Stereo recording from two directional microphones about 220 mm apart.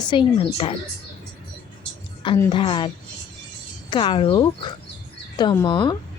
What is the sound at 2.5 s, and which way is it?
A woman's voice, 20° left (ahead or behind).